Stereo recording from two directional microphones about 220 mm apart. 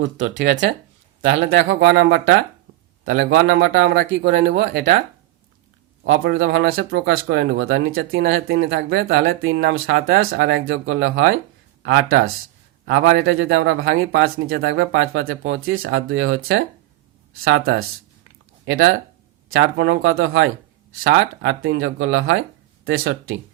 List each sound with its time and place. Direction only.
0.2 s speech: 55° right (ahead or behind)
6.1 s speech: 60° right (ahead or behind)